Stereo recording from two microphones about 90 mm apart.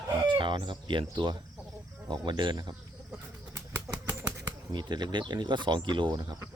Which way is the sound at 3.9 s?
25° right (ahead or behind).